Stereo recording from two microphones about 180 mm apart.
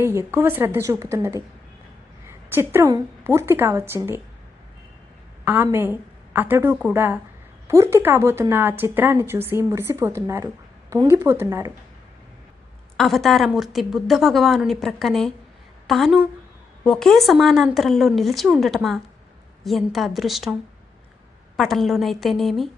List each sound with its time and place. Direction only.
0.0 s a woman's voice: 15° right (ahead or behind)
5.6 s a woman's voice: 15° right (ahead or behind)
13.0 s a woman's voice: centre (ahead or behind)